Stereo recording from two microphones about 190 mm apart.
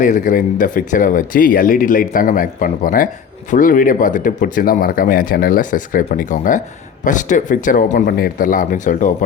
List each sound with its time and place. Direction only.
0.0 s speech: 45° left (ahead or behind)